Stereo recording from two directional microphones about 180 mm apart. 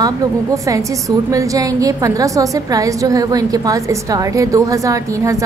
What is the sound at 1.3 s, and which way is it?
A woman's voice, 20° right (ahead or behind).